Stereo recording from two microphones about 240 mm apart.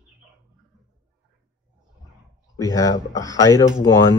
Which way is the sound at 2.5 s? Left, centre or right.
Centre.